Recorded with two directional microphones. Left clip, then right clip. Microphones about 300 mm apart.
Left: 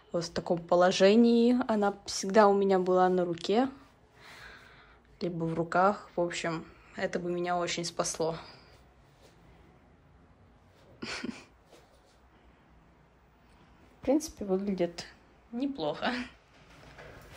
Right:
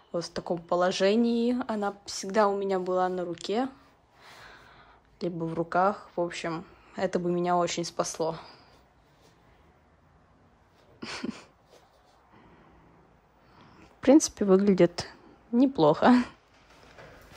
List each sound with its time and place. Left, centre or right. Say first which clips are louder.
0.1 s speech: even; centre
11.0 s a sound: right 1 dB; centre
14.0 s a woman's voice: right 8 dB; right
15.5 s speech: right 11 dB; right